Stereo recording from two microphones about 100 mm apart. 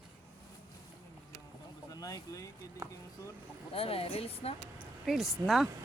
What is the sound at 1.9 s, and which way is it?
Speech, 35° left (ahead or behind).